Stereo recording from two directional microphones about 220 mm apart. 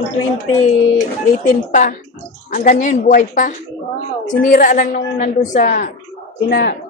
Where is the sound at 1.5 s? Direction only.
35° left (ahead or behind).